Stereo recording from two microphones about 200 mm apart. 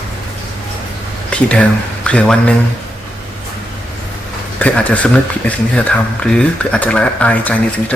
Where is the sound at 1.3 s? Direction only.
5° left (ahead or behind).